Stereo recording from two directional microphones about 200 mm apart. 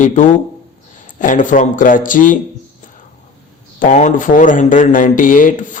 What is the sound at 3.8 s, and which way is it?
Speech, 40° left (ahead or behind).